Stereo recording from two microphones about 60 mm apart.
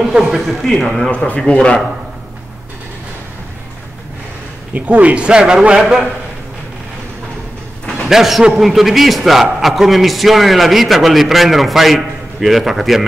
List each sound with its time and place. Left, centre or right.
0.2 s a man's voice: centre
1.0 s a man's voice: centre
4.7 s speech: right
7.9 s a man's voice: centre